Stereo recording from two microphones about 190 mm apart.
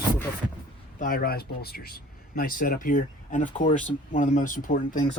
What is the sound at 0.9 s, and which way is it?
Speech, 50° left (ahead or behind).